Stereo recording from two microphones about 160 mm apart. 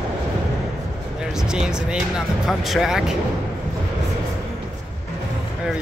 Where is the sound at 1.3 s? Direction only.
5° right (ahead or behind).